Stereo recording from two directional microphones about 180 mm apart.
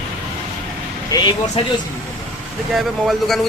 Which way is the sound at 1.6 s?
30° left (ahead or behind).